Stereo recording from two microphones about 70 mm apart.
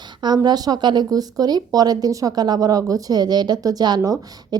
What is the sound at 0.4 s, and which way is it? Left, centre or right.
A woman's voice, right.